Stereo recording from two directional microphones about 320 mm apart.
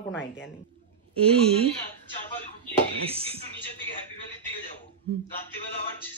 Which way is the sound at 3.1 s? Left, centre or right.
Centre.